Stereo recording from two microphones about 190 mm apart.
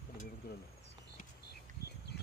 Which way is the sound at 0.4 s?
55° left (ahead or behind).